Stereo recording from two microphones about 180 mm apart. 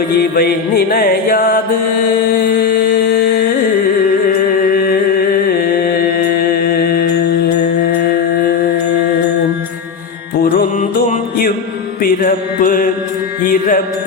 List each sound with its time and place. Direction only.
0.2 s music: 60° left (ahead or behind)
2.3 s a sound: 55° left (ahead or behind)
4.7 s music: 55° left (ahead or behind)
6.5 s mantra: 55° left (ahead or behind)
10.4 s music: 50° left (ahead or behind)
12.0 s mantra: 50° left (ahead or behind)